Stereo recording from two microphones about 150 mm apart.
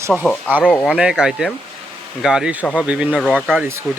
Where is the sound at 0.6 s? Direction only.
5° left (ahead or behind).